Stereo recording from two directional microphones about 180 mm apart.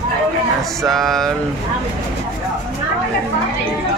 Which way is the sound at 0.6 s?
Centre (ahead or behind).